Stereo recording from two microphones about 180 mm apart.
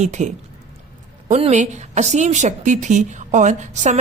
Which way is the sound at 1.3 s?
40° right (ahead or behind).